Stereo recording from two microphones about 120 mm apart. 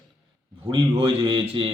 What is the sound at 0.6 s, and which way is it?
A man's voice, 45° right (ahead or behind).